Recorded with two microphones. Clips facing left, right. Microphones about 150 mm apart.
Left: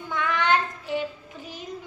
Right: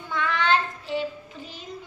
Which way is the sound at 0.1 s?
15° left (ahead or behind).